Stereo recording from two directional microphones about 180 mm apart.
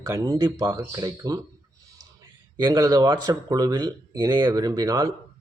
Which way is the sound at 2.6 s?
20° right (ahead or behind).